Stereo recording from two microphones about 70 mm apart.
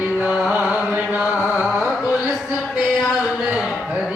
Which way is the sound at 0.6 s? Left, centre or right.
Right.